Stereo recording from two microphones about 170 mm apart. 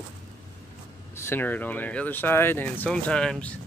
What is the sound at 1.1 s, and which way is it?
Speech, 15° left (ahead or behind).